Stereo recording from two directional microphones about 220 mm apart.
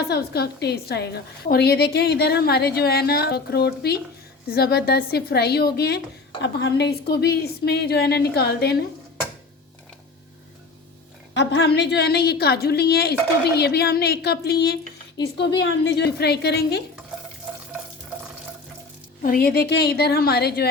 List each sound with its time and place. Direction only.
0.0 s a woman's voice: 45° left (ahead or behind)
11.3 s a woman's voice: 50° left (ahead or behind)
19.2 s a woman's voice: 40° left (ahead or behind)